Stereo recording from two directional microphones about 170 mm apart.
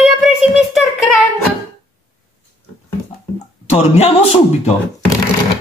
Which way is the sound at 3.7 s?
40° left (ahead or behind).